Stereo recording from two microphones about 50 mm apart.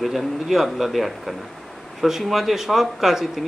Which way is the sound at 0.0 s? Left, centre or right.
Centre.